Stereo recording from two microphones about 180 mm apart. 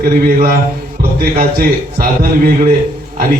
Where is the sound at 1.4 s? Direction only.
50° right (ahead or behind).